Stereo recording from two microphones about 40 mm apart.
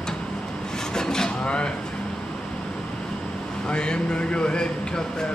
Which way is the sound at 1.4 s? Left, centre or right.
Left.